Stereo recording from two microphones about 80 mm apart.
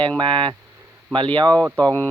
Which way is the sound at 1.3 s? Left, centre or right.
Right.